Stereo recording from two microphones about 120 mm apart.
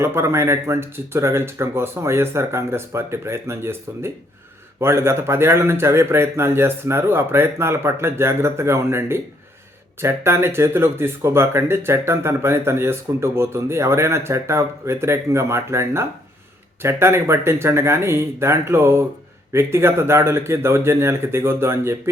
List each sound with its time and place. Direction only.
0.0 s speech: 20° right (ahead or behind)